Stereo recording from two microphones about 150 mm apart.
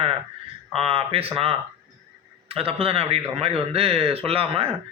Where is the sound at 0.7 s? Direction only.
40° right (ahead or behind).